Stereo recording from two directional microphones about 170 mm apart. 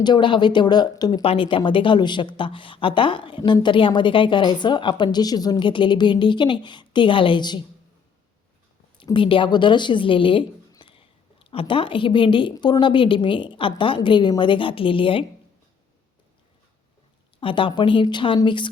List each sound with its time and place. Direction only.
0.0 s speech: 25° left (ahead or behind)
9.0 s speech: 30° left (ahead or behind)
17.4 s speech: 30° left (ahead or behind)